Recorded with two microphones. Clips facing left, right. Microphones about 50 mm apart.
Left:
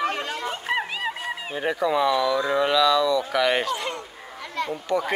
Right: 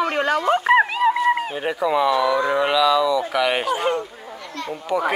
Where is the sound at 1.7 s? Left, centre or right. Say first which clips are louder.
Right 3 dB; centre.